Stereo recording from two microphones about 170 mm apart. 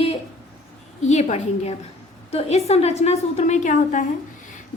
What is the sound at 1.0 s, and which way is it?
A woman's voice, 40° left (ahead or behind).